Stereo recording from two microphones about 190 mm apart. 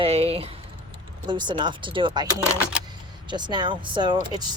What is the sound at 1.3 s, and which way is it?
Speech, 25° right (ahead or behind).